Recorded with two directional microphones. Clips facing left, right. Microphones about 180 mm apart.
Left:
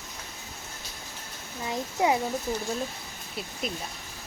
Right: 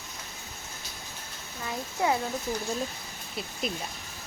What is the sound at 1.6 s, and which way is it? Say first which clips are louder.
Speech: left 3 dB; 20° left (ahead or behind).